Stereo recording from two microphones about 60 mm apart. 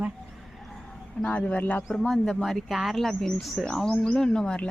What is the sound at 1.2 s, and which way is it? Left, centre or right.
Speech, left.